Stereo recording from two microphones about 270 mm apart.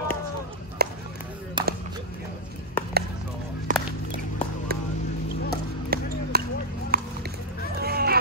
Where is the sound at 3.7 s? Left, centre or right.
Right.